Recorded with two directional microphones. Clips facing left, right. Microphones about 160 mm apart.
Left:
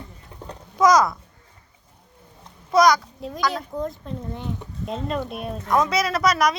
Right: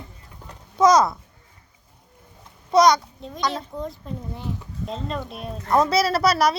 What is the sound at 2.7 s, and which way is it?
Speech, 25° right (ahead or behind).